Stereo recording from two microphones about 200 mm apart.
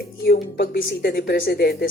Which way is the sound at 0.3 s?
50° left (ahead or behind).